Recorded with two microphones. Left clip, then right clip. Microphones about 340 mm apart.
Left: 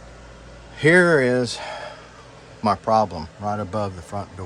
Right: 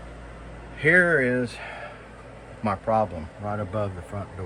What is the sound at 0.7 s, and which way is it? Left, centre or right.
Speech, centre.